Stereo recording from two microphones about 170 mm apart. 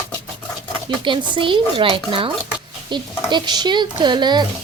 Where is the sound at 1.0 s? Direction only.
30° right (ahead or behind).